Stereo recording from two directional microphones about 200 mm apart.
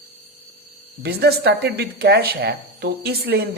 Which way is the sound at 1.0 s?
55° right (ahead or behind).